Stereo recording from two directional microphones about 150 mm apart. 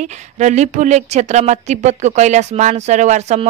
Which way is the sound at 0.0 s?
55° right (ahead or behind).